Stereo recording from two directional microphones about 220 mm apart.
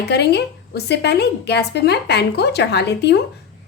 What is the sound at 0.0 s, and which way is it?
A woman's voice, 50° left (ahead or behind).